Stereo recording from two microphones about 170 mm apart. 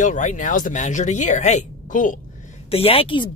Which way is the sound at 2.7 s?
35° left (ahead or behind).